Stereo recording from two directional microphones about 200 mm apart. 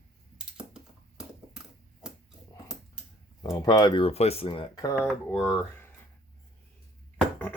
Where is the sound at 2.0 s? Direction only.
5° right (ahead or behind).